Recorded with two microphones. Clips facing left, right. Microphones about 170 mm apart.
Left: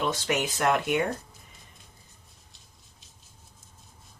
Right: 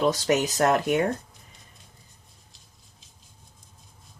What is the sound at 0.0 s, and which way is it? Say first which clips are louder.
Speech: right 5 dB; 40° right (ahead or behind).